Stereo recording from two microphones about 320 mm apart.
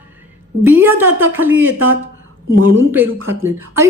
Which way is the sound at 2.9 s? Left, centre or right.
Centre.